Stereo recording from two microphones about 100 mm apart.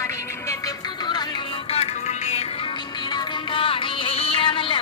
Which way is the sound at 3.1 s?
55° left (ahead or behind).